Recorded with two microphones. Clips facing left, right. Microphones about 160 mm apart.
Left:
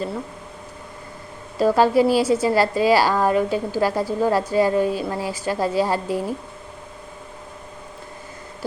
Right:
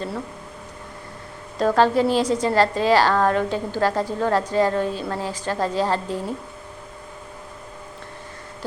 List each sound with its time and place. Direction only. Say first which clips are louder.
1.5 s a woman's voice: left 2 dB; 10° left (ahead or behind)